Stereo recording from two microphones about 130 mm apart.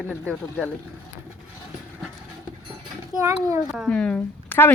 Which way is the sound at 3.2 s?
20° right (ahead or behind).